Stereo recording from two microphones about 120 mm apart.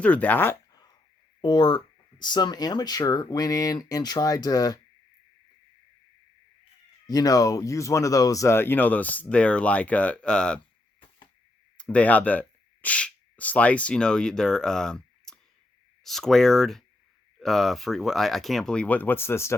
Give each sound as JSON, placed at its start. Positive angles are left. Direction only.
{"t": 0.0, "sound": "speech", "side_deg": 10}
{"t": 1.4, "sound": "speech", "side_deg": 40}
{"t": 7.1, "sound": "speech", "side_deg": 30}
{"t": 11.8, "sound": "speech", "side_deg": 10}